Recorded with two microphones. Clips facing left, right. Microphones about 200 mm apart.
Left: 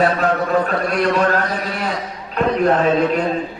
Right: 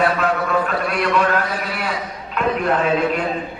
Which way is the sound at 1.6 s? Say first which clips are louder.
Left 2 dB; 40° left (ahead or behind).